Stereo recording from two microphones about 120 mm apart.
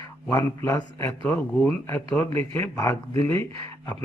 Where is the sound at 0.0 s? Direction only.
35° left (ahead or behind).